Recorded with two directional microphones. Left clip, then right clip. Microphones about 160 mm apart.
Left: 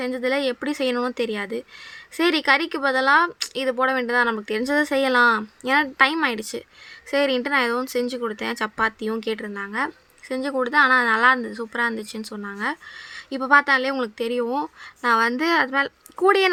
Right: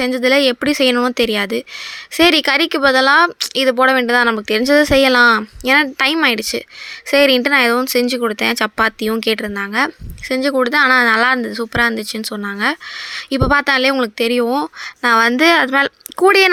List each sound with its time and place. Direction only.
0.0 s speech: 25° right (ahead or behind)